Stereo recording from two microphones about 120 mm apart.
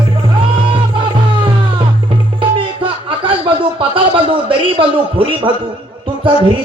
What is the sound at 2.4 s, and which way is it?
A man's voice, 45° right (ahead or behind).